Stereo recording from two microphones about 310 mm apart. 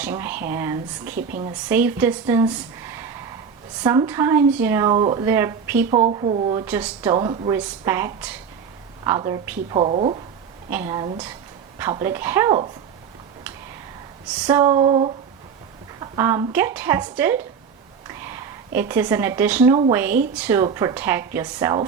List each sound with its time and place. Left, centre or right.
0.0 s a woman's voice: centre
1.1 s a woman's voice: right
1.5 s a woman's voice: centre
5.7 s a woman's voice: centre
6.7 s a woman's voice: centre
10.7 s a woman's voice: centre
14.4 s a woman's voice: centre